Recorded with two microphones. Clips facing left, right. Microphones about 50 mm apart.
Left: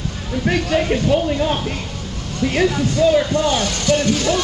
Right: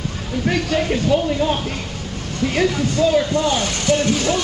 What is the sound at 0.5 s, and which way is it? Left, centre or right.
Speech, centre.